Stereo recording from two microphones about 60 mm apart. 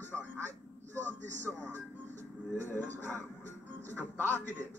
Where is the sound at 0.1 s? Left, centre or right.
Centre.